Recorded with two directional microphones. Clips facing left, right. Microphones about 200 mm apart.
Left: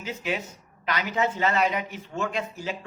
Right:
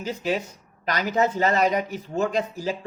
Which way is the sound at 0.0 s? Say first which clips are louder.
Right 4 dB; 35° right (ahead or behind).